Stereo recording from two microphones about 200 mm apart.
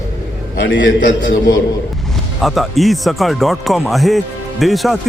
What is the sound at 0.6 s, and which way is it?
Speech, 70° left (ahead or behind).